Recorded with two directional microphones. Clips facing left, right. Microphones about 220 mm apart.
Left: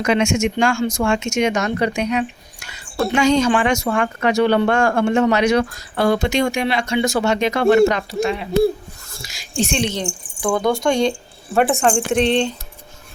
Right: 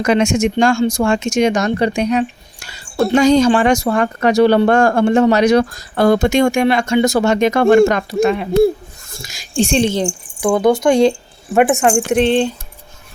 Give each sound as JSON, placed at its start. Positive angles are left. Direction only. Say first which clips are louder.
{"t": 0.0, "sound": "speech", "louder": "right 3 dB", "side_deg": -40}
{"t": 9.6, "sound": "speech", "louder": "right 6 dB", "side_deg": -30}
{"t": 11.8, "sound": "speech", "louder": "right 3 dB", "side_deg": -10}